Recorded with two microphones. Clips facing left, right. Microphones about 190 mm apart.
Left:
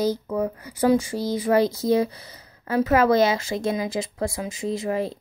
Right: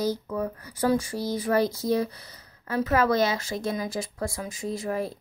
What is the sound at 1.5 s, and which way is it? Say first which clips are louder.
Speech: left 4 dB; 25° left (ahead or behind).